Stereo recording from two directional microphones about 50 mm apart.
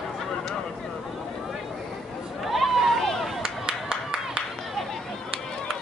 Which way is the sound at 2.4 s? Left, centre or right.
Centre.